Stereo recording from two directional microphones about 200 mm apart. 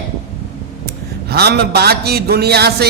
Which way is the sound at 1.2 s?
55° right (ahead or behind).